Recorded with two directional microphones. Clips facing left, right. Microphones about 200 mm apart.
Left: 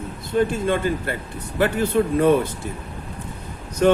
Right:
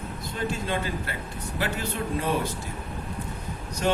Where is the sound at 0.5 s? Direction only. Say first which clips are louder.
Left 8 dB; 50° left (ahead or behind).